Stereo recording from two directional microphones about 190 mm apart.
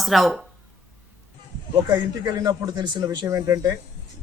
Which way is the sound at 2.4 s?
20° right (ahead or behind).